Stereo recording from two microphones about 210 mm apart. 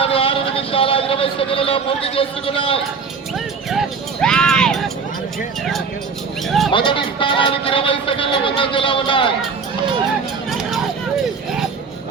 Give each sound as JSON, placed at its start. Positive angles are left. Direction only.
{"t": 0.0, "sound": "vehicle", "side_deg": 25}
{"t": 3.7, "sound": "a sound", "side_deg": 0}
{"t": 6.7, "sound": "speech", "side_deg": 25}
{"t": 10.5, "sound": "vehicle", "side_deg": 0}